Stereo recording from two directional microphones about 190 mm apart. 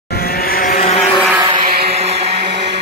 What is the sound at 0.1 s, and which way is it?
Vehicle, 55° left (ahead or behind).